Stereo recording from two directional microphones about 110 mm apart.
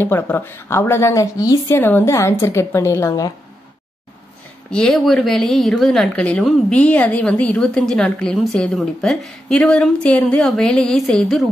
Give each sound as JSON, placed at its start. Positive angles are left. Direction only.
{"t": 0.0, "sound": "speech", "side_deg": 20}
{"t": 1.8, "sound": "speech", "side_deg": 20}
{"t": 4.6, "sound": "a woman's voice", "side_deg": 10}